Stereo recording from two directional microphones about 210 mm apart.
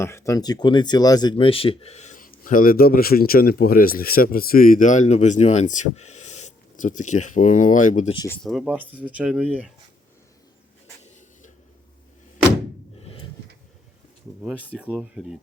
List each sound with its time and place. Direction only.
0.0 s speech: 15° left (ahead or behind); by 8.1 s 35° left (ahead or behind)
8.3 s speech: centre (ahead or behind)
13.0 s a sound: 25° left (ahead or behind)
14.4 s speech: 5° right (ahead or behind)